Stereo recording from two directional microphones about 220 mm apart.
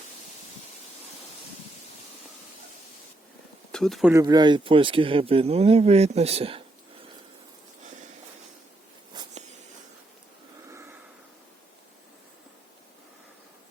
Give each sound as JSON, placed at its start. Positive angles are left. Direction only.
{"t": 3.7, "sound": "speech", "side_deg": 0}
{"t": 4.1, "sound": "speech", "side_deg": -15}
{"t": 10.7, "sound": "a sound", "side_deg": -10}